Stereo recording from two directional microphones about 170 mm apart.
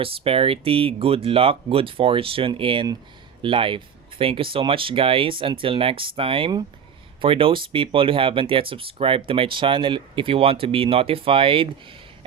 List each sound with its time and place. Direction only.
0.0 s speech: 35° right (ahead or behind)